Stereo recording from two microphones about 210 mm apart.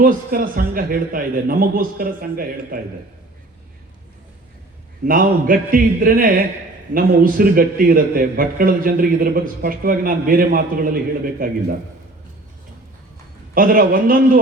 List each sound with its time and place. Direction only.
0.0 s speech: 45° right (ahead or behind)
5.0 s speech: 45° right (ahead or behind)
13.5 s speech: 40° right (ahead or behind)